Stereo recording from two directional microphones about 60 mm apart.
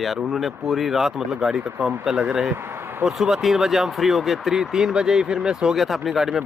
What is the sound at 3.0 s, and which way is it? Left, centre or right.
Speech, centre.